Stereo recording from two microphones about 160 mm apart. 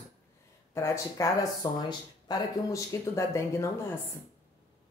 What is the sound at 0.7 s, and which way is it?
Speech, 20° left (ahead or behind).